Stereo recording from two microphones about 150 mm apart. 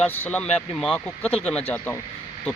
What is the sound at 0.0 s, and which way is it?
Speech, 10° left (ahead or behind).